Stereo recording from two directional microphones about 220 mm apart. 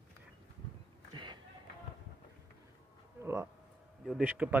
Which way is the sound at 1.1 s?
20° right (ahead or behind).